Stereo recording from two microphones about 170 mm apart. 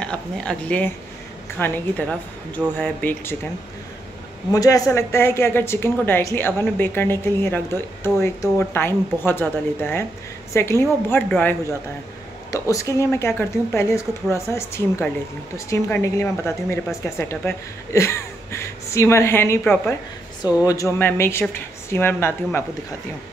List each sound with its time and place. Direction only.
0.0 s a woman's voice: 5° left (ahead or behind)
4.5 s a woman's voice: 20° left (ahead or behind)